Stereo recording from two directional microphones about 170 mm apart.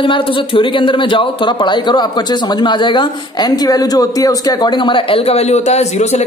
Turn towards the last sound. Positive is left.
turn(degrees=40)  # may be behind; listen again after turning